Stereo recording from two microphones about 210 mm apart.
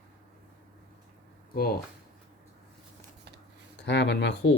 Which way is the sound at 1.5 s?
45° left (ahead or behind).